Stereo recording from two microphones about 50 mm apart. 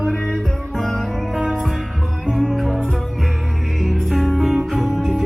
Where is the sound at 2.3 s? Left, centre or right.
Centre.